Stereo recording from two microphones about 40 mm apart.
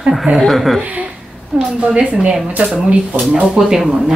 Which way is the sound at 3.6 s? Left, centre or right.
Centre.